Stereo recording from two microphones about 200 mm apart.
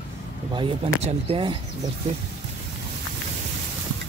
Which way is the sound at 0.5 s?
25° right (ahead or behind).